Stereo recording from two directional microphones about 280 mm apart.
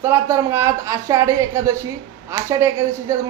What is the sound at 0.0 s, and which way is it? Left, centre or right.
A man's voice, centre.